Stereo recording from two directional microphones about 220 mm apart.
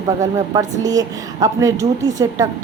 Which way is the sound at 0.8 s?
15° right (ahead or behind).